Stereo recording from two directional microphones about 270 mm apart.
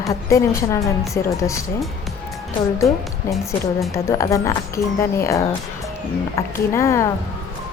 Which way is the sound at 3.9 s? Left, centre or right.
Centre.